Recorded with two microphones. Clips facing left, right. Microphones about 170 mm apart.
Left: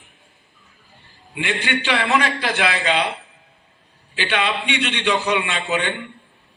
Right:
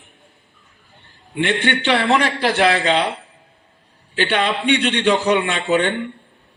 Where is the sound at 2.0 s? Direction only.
35° right (ahead or behind).